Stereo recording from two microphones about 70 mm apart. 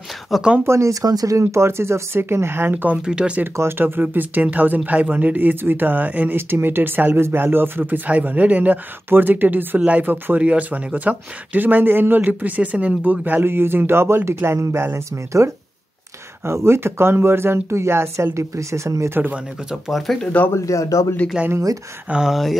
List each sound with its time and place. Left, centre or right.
0.3 s speech: centre
0.7 s speech: right
1.0 s speech: right
1.5 s speech: right
3.1 s speech: centre
3.5 s speech: right
19.9 s speech: centre
20.5 s a man's voice: left
22.1 s speech: centre